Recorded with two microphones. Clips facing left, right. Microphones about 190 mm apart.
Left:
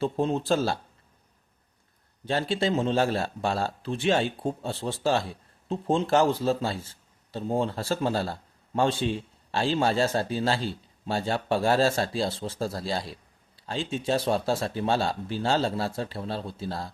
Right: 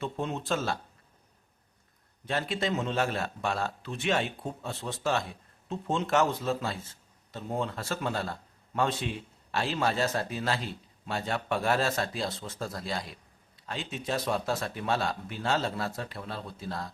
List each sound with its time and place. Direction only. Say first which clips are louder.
0.0 s a man's voice: left 7 dB; 30° left (ahead or behind)
2.2 s a man's voice: left 5 dB; 30° left (ahead or behind)